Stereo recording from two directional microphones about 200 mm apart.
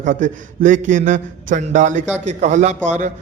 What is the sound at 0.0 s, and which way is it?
Speech, 40° right (ahead or behind).